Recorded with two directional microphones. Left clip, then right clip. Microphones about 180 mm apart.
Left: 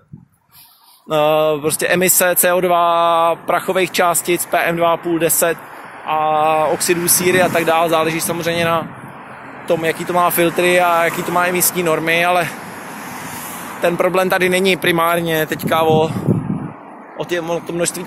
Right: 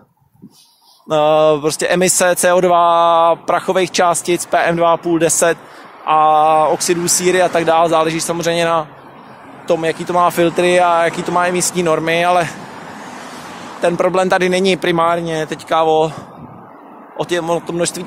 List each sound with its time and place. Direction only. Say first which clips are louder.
1.0 s speech: right 3 dB; 15° right (ahead or behind)
6.0 s a sound: right 5 dB; 30° right (ahead or behind)
6.3 s speech: right 3 dB; 15° right (ahead or behind)
13.7 s speech: right 1 dB; 15° right (ahead or behind)
17.2 s speech: right 3 dB; 25° right (ahead or behind)